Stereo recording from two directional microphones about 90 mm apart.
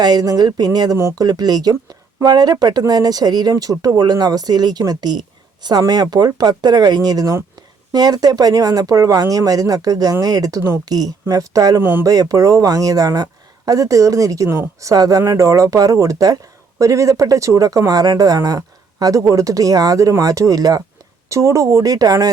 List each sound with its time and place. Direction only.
0.0 s speech: 45° right (ahead or behind)
11.8 s speech: 20° right (ahead or behind)
12.0 s speech: 40° right (ahead or behind)